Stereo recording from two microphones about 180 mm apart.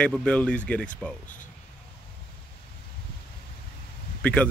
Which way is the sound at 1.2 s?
45° left (ahead or behind).